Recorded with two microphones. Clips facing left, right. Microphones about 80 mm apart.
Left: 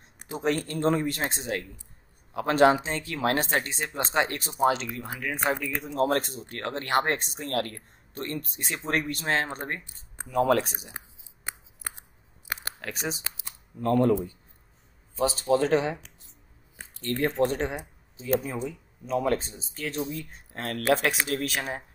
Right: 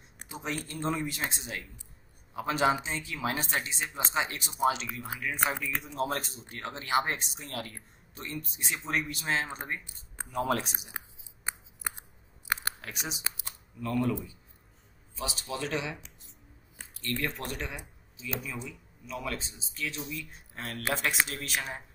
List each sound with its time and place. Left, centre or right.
0.3 s speech: left
10.3 s speech: left
12.9 s speech: left
15.1 s speech: left
20.3 s speech: left